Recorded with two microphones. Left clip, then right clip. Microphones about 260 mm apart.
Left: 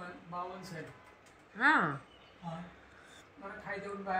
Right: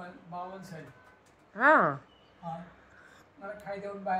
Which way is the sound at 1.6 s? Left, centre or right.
Centre.